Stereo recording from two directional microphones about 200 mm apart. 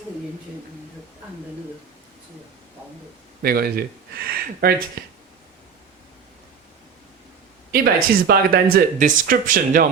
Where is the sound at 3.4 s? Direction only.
50° right (ahead or behind).